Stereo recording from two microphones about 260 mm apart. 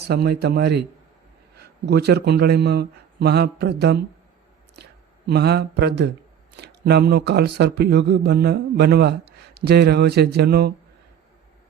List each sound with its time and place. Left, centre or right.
0.1 s speech: right